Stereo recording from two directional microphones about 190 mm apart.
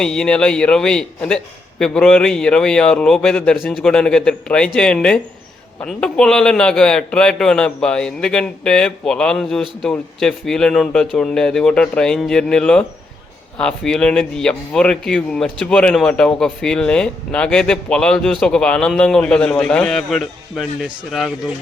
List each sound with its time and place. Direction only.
0.0 s speech: 5° left (ahead or behind)